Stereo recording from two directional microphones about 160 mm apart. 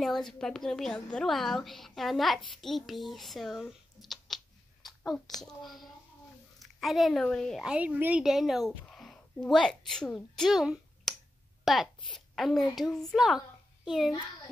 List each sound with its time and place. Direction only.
0.0 s a woman's voice: centre (ahead or behind)